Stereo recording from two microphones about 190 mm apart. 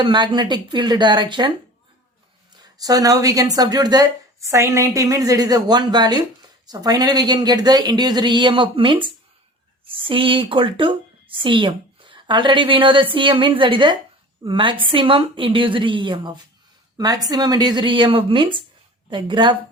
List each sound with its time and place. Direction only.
0.0 s a woman's voice: 25° right (ahead or behind)